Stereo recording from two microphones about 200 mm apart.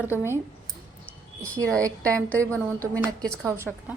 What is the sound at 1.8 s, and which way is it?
Speech, 15° right (ahead or behind).